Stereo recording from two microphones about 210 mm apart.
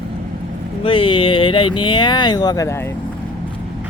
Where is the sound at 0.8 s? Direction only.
25° left (ahead or behind).